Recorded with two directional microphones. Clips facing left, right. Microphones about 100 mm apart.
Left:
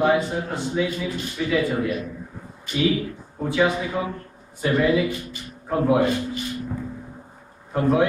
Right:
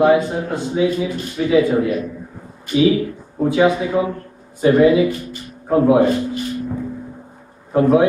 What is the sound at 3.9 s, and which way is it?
A man's voice, 25° right (ahead or behind).